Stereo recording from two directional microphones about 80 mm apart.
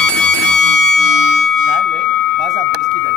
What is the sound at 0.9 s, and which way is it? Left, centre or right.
Music, centre.